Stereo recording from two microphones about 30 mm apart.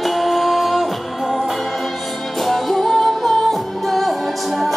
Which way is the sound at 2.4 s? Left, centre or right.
Centre.